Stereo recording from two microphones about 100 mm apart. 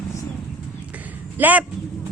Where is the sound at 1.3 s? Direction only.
15° right (ahead or behind).